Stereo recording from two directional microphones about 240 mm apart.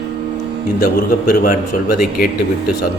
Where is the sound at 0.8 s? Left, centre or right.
Left.